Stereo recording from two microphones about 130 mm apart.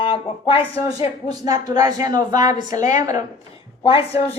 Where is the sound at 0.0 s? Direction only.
40° left (ahead or behind).